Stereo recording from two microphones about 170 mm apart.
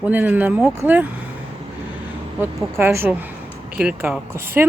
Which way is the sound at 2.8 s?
15° right (ahead or behind).